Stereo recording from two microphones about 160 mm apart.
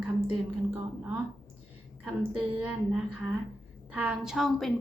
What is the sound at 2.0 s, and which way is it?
A woman's voice, 5° right (ahead or behind).